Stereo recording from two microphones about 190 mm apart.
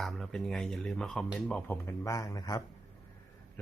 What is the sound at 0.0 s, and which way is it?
A man's voice, centre (ahead or behind).